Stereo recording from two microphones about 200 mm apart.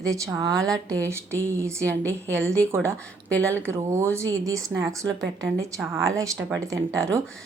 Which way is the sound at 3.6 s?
15° right (ahead or behind).